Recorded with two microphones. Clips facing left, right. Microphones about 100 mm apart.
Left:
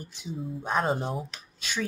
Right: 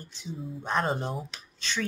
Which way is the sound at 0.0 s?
10° left (ahead or behind).